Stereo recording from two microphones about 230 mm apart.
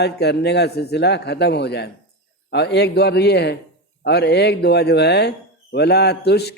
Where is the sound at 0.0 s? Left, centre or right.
Left.